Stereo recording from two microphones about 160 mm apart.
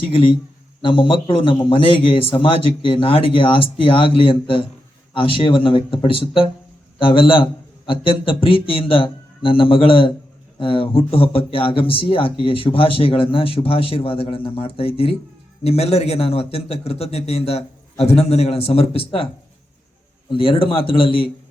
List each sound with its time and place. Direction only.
0.1 s speech: 35° left (ahead or behind)
20.3 s speech: 35° left (ahead or behind)